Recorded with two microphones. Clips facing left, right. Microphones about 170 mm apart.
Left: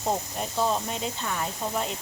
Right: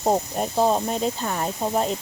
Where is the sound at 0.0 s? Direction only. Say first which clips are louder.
Right 7 dB; 40° right (ahead or behind).